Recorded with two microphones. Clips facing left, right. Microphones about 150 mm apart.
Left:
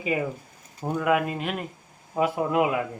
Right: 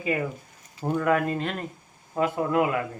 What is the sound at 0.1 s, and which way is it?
Speech, 15° left (ahead or behind).